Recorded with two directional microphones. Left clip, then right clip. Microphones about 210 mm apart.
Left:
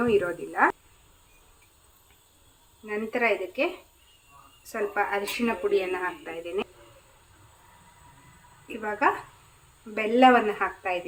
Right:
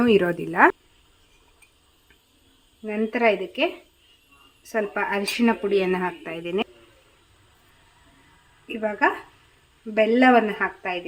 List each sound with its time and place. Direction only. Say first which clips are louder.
0.0 s a woman's voice: right 5 dB; 55° right (ahead or behind)
2.8 s a woman's voice: right 5 dB; 45° right (ahead or behind)
4.7 s speech: right 2 dB; 50° right (ahead or behind)
9.9 s a woman's voice: right 2 dB; 45° right (ahead or behind)